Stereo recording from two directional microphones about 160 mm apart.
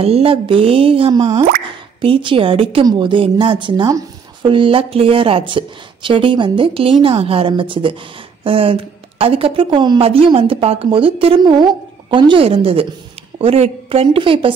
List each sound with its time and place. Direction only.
0.0 s a woman's voice: 35° right (ahead or behind)